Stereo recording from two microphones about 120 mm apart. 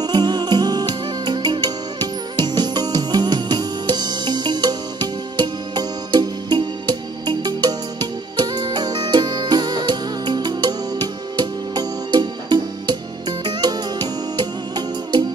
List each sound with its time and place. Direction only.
0.0 s music: 35° right (ahead or behind)